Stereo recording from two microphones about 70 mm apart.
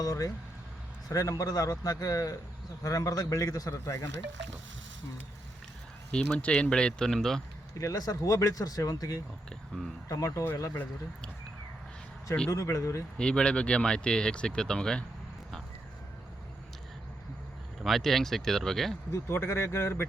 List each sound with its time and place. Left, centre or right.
0.0 s speech: left
6.1 s speech: centre
7.8 s speech: left
10.4 s speech: left
12.5 s speech: left
13.1 s speech: centre
17.8 s speech: centre
19.1 s speech: left